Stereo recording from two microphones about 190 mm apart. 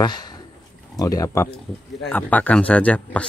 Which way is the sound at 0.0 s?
20° left (ahead or behind).